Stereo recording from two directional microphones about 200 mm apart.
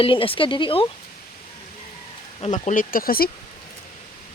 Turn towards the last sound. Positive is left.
turn(degrees=45)  # may be behind; listen again after turning